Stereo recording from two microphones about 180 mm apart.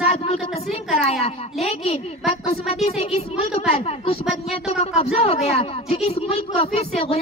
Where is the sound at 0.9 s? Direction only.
35° left (ahead or behind).